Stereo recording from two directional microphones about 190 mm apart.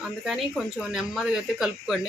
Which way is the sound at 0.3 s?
Centre (ahead or behind).